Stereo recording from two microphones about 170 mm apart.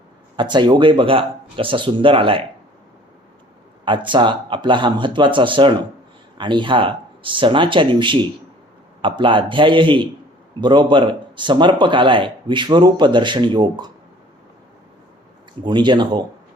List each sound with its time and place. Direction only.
0.3 s speech: 25° right (ahead or behind)
3.8 s speech: 30° right (ahead or behind)
15.6 s speech: 25° right (ahead or behind)